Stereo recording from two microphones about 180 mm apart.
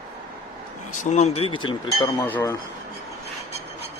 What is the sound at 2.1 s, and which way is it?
Speech, 15° left (ahead or behind).